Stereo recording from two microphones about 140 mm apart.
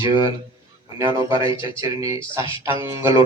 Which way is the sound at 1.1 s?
20° right (ahead or behind).